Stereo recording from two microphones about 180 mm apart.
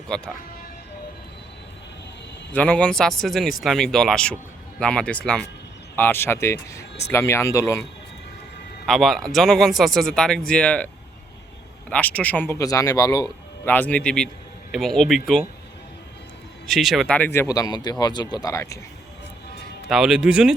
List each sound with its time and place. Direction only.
0.1 s a man's voice: 5° left (ahead or behind)
2.5 s a man's voice: 10° left (ahead or behind)
8.9 s a man's voice: centre (ahead or behind)
11.9 s a man's voice: 5° left (ahead or behind)
16.6 s a man's voice: centre (ahead or behind); by 18.8 s 15° left (ahead or behind)
19.9 s a man's voice: 5° right (ahead or behind)